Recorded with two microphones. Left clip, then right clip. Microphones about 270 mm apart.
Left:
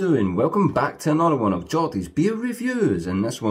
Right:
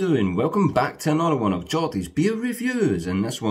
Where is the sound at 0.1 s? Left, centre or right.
Centre.